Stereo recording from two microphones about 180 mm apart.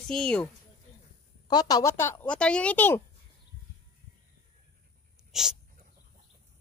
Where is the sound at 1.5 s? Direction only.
20° left (ahead or behind).